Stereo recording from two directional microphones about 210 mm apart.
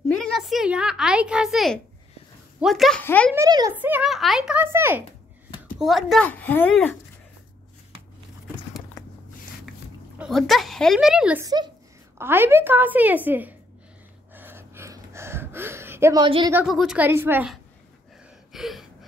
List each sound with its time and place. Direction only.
0.1 s a sound: centre (ahead or behind)
2.6 s speech: centre (ahead or behind)
3.3 s a woman's voice: 15° right (ahead or behind)
3.8 s speech: 5° right (ahead or behind)
5.8 s speech: centre (ahead or behind)
9.7 s speech: centre (ahead or behind)
11.4 s a woman's voice: 20° right (ahead or behind)
14.3 s gasp: 10° right (ahead or behind)
16.6 s a woman's voice: centre (ahead or behind)
18.5 s gasp: centre (ahead or behind)